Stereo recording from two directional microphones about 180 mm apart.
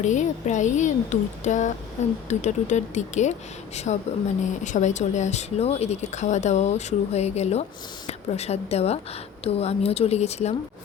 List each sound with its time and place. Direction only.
0.0 s speech: 40° left (ahead or behind)